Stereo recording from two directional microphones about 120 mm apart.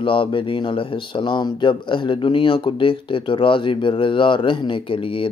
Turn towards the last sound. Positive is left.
turn(degrees=45)  # may be behind; listen again after turning